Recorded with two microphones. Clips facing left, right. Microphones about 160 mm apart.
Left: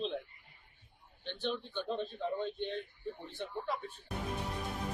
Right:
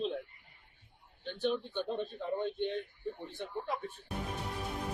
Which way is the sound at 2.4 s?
15° right (ahead or behind).